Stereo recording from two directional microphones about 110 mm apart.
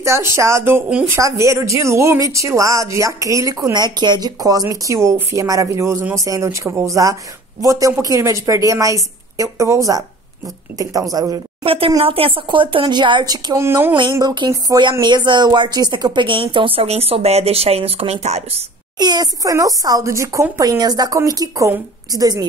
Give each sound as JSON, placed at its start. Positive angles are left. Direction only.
{"t": 0.0, "sound": "a woman's voice", "side_deg": -25}
{"t": 11.6, "sound": "a woman's voice", "side_deg": -55}
{"t": 13.6, "sound": "a woman's voice", "side_deg": -25}
{"t": 14.2, "sound": "speech", "side_deg": -45}
{"t": 18.9, "sound": "a woman's voice", "side_deg": -40}